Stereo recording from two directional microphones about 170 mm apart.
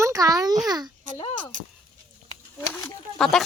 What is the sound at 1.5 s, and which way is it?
Speech, 50° right (ahead or behind).